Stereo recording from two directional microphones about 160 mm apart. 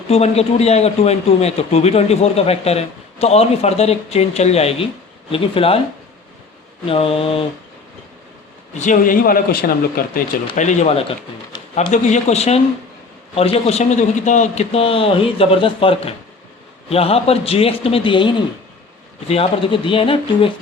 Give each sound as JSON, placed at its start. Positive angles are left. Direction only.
{"t": 0.1, "sound": "a man's voice", "side_deg": 40}
{"t": 6.8, "sound": "a man's voice", "side_deg": 35}
{"t": 8.8, "sound": "a man's voice", "side_deg": 55}
{"t": 10.5, "sound": "a man's voice", "side_deg": 50}